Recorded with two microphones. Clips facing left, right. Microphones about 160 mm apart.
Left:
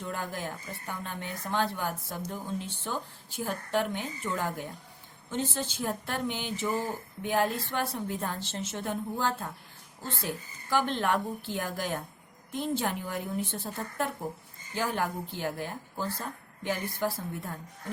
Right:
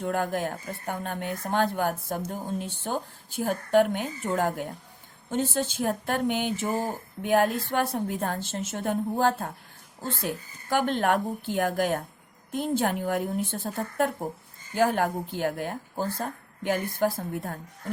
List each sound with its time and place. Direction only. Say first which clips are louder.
0.0 s speech: right 8 dB; 55° right (ahead or behind)